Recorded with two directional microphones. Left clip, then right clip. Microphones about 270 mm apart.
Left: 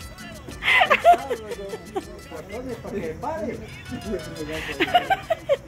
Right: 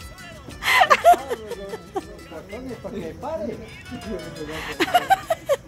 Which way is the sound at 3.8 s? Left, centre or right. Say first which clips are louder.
Left 2 dB; centre.